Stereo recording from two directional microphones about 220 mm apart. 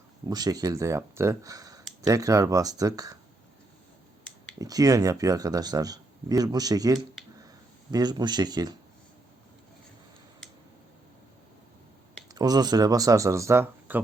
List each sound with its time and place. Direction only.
0.3 s speech: 15° right (ahead or behind)
4.5 s speech: 15° right (ahead or behind)
12.3 s speech: 15° right (ahead or behind)